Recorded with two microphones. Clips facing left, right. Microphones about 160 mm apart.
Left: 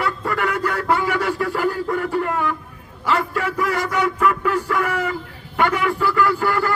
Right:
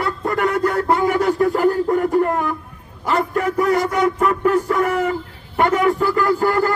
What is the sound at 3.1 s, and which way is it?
Music, 40° right (ahead or behind).